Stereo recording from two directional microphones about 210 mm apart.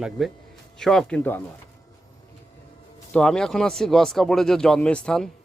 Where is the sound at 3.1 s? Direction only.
5° left (ahead or behind).